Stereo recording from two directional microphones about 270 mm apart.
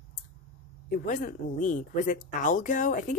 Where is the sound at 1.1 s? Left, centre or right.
Left.